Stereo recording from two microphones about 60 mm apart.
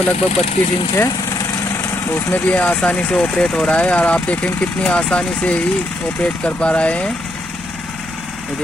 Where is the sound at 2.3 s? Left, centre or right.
Left.